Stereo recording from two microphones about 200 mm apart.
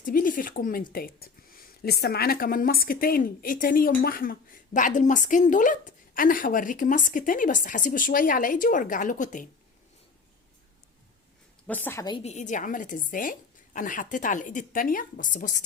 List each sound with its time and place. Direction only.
0.0 s a woman's voice: 40° left (ahead or behind)
11.6 s a woman's voice: 10° left (ahead or behind)
12.2 s a woman's voice: 35° left (ahead or behind)